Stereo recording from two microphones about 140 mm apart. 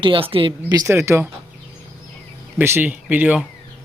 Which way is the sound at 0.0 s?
40° right (ahead or behind).